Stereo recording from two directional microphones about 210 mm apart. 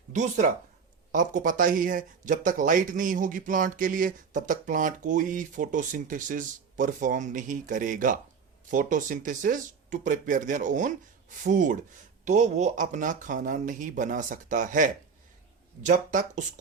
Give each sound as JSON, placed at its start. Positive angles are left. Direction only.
{"t": 0.1, "sound": "speech", "side_deg": -35}